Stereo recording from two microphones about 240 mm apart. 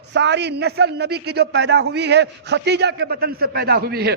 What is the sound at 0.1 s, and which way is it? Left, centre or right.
A man's voice, right.